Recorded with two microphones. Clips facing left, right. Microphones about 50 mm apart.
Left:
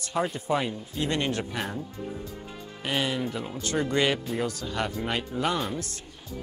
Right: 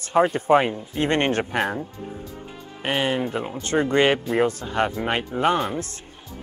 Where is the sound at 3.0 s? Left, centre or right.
Right.